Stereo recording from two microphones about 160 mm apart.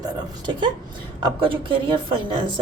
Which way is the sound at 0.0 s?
30° right (ahead or behind).